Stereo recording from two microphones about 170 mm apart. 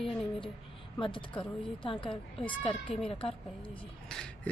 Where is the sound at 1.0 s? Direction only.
30° left (ahead or behind).